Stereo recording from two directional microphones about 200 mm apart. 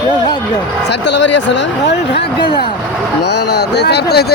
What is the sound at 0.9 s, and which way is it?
Speech, 60° left (ahead or behind).